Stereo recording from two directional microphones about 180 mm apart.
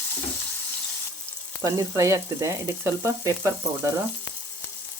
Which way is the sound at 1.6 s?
15° right (ahead or behind).